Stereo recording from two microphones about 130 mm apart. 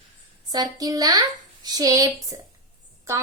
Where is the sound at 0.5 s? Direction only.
30° right (ahead or behind).